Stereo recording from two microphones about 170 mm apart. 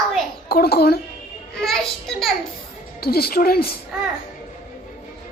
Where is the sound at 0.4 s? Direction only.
65° left (ahead or behind).